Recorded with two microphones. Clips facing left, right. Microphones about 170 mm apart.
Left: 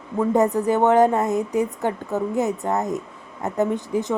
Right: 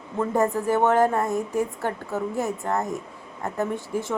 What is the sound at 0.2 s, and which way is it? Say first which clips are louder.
Speech: left 4 dB; 20° left (ahead or behind).